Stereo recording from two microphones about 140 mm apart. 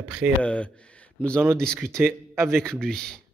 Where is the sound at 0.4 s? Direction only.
10° left (ahead or behind).